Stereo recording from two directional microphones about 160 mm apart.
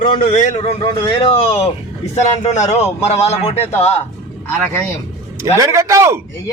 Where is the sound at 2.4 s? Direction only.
45° left (ahead or behind).